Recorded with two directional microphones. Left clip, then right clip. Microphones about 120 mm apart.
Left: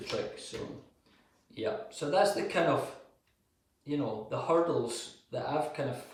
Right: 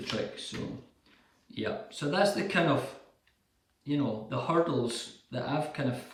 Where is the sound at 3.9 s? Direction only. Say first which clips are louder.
Right 1 dB; 15° right (ahead or behind).